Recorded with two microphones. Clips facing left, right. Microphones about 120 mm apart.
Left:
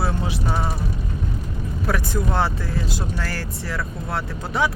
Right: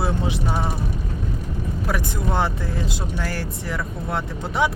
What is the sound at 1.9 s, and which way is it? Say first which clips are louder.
Speech: left 2 dB; 15° right (ahead or behind).